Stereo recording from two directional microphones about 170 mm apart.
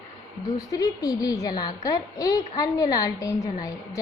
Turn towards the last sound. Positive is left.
turn(degrees=20)  # may be behind; listen again after turning